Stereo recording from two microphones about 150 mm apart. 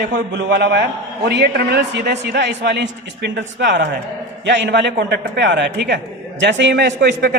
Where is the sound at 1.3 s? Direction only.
90° right.